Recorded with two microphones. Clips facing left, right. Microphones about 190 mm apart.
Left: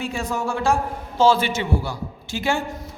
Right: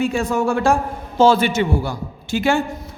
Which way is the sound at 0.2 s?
55° right (ahead or behind).